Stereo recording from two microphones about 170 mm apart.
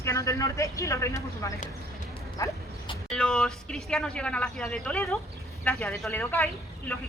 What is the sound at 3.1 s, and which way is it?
Speech, 5° left (ahead or behind).